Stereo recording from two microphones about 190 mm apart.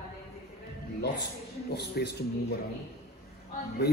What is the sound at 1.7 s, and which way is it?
Speech, 60° left (ahead or behind).